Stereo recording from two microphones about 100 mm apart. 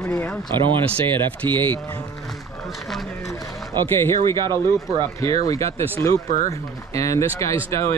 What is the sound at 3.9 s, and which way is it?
Speech, 25° left (ahead or behind).